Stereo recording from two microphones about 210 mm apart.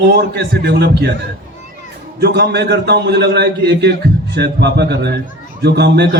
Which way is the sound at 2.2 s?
50° right (ahead or behind).